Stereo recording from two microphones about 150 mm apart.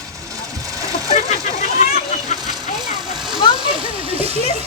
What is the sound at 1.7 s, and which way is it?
Vehicle, 55° left (ahead or behind).